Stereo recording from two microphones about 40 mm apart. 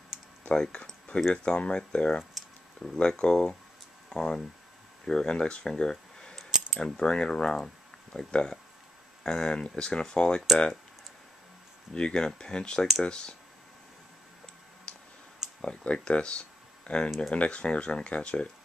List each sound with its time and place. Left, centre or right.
0.6 s speech: centre
5.7 s a sound: centre
6.8 s speech: left
8.3 s speech: left
11.9 s speech: centre
14.9 s clicking: left
15.6 s speech: left